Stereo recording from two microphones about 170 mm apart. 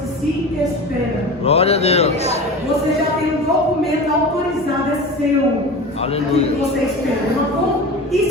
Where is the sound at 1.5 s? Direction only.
35° left (ahead or behind).